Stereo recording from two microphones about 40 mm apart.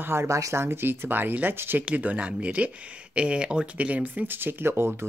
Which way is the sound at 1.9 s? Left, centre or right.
Right.